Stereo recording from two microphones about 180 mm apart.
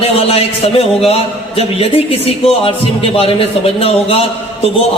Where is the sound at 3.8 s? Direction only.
30° left (ahead or behind).